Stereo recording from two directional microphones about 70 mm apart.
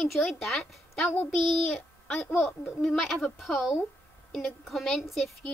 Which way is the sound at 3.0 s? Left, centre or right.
Centre.